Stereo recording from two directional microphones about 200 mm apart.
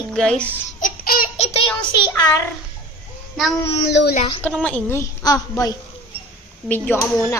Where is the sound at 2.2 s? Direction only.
20° left (ahead or behind).